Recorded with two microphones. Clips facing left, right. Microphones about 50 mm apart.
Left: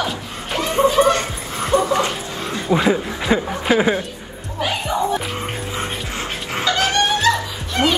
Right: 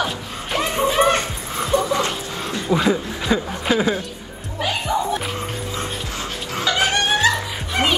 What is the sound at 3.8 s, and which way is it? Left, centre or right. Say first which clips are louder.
Speech: left 3 dB; left.